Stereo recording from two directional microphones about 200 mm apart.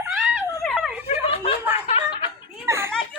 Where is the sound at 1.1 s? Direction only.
30° left (ahead or behind).